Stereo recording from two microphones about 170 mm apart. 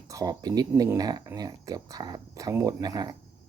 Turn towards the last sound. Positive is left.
turn(degrees=-20)  # may be behind; listen again after turning